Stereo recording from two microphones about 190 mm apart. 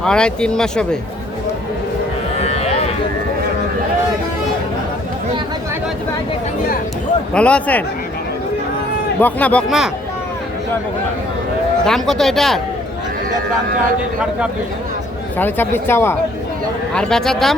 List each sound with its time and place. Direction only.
0.0 s speech: 5° left (ahead or behind)
2.4 s a sound: 35° left (ahead or behind)
7.3 s speech: 5° left (ahead or behind)
9.2 s speech: 5° left (ahead or behind)
11.9 s speech: centre (ahead or behind)
15.4 s speech: 10° left (ahead or behind)